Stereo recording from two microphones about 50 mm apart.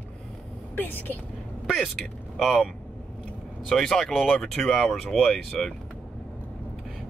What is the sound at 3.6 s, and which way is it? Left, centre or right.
Speech, centre.